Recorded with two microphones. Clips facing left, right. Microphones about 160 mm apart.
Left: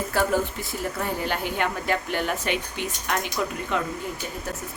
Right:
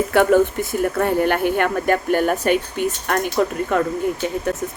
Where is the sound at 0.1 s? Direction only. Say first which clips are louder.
Right 9 dB; 65° right (ahead or behind); by 3.8 s 50° right (ahead or behind).